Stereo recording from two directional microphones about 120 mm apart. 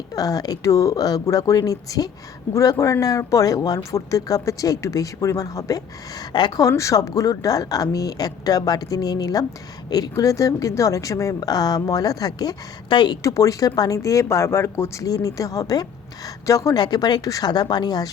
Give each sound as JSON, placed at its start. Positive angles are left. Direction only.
{"t": 0.1, "sound": "speech", "side_deg": 30}
{"t": 13.2, "sound": "speech", "side_deg": 25}